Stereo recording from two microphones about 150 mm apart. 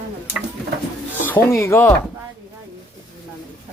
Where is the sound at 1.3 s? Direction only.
15° left (ahead or behind).